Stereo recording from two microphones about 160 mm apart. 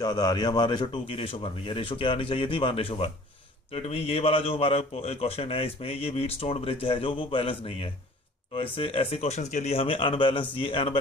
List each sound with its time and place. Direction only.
0.0 s a man's voice: 25° left (ahead or behind)